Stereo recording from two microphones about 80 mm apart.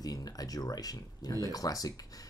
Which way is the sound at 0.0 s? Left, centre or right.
Left.